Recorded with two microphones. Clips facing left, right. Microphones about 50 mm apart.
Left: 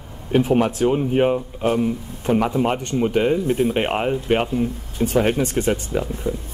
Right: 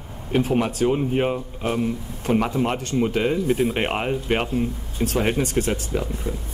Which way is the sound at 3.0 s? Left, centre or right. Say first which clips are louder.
Left 3 dB; centre.